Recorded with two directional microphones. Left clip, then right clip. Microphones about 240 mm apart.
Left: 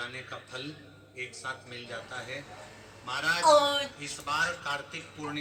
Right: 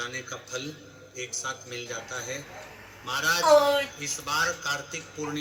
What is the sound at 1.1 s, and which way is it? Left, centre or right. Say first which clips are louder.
Speech: right 4 dB; right.